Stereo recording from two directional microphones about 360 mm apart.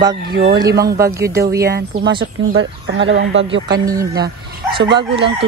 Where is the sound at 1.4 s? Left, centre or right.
Right.